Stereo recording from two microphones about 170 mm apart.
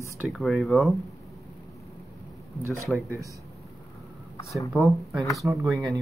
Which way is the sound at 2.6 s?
15° right (ahead or behind).